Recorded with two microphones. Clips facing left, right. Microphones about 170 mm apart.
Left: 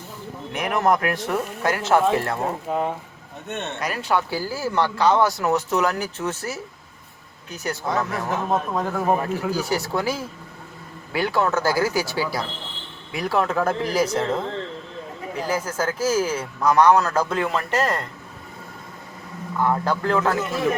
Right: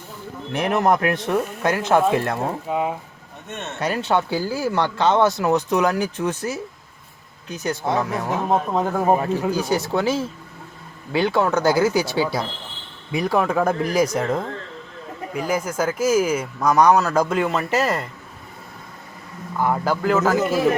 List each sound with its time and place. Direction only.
0.5 s speech: 30° right (ahead or behind)
2.6 s speech: 5° right (ahead or behind)
3.8 s speech: 25° right (ahead or behind); by 18.0 s 10° right (ahead or behind)
19.6 s speech: 10° right (ahead or behind)